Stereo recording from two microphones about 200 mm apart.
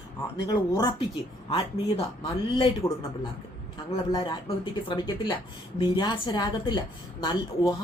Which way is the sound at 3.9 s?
25° left (ahead or behind).